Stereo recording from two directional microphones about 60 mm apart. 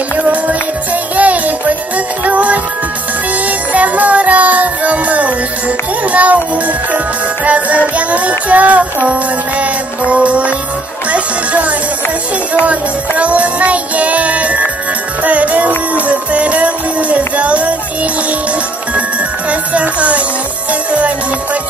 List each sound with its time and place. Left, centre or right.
0.2 s music: right
7.9 s child singing: right
11.1 s music: right
19.5 s music: right